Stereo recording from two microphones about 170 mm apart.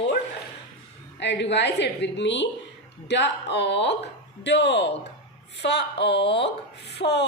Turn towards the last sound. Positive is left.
turn(degrees=80)